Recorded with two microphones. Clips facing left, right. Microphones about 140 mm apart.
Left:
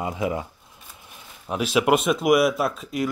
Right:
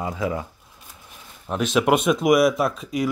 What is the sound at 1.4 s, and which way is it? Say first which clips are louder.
Speech: right 1 dB; 5° left (ahead or behind).